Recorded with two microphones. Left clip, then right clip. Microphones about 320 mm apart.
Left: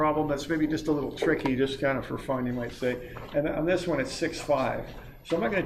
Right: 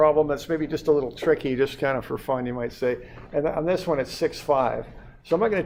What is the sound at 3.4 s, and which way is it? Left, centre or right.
Speech, right.